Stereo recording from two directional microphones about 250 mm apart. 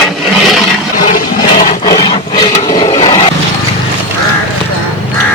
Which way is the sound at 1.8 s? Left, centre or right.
Centre.